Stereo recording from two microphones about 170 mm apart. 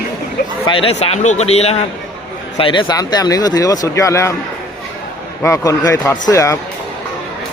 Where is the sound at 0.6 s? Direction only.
30° left (ahead or behind).